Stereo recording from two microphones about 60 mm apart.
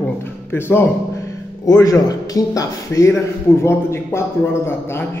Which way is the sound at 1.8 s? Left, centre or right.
Left.